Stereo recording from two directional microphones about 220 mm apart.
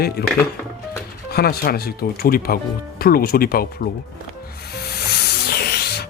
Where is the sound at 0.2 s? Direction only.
45° left (ahead or behind).